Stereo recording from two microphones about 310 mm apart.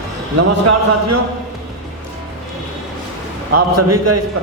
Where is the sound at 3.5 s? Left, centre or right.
Right.